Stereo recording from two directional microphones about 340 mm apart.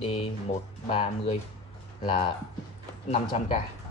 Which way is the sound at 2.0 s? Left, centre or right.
Centre.